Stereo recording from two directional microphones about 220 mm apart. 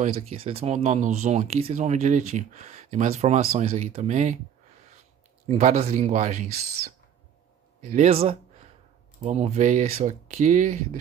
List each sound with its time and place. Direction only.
0.0 s speech: 25° right (ahead or behind)
5.5 s speech: 30° right (ahead or behind)
7.8 s speech: 30° right (ahead or behind)